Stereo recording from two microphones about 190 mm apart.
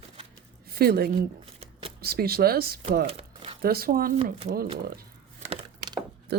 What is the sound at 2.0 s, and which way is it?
Speech, 55° right (ahead or behind).